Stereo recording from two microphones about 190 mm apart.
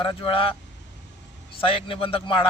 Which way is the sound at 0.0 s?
25° left (ahead or behind).